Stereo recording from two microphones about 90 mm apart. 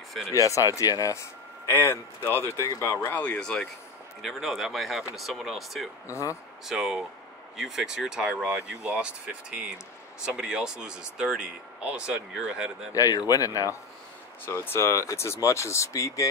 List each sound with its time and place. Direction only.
0.3 s speech: 35° left (ahead or behind)
3.0 s speech: 15° left (ahead or behind); by 12.7 s 10° right (ahead or behind)
12.9 s speech: 40° left (ahead or behind)
14.4 s speech: 25° left (ahead or behind)